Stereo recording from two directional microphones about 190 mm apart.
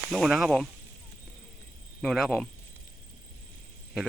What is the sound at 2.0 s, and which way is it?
Speech, centre (ahead or behind).